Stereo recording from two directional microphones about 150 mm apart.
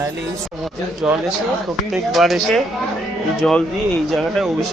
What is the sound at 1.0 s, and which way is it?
Speech, 5° right (ahead or behind).